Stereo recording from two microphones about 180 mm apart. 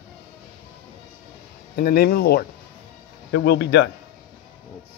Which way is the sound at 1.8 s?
55° left (ahead or behind).